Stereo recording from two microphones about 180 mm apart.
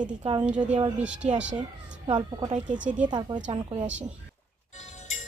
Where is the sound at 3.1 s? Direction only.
25° right (ahead or behind).